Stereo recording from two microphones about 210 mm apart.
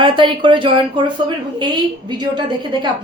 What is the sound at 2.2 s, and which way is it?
Speech, 20° right (ahead or behind).